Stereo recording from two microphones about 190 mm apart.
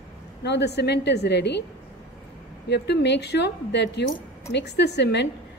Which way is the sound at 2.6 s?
60° left (ahead or behind).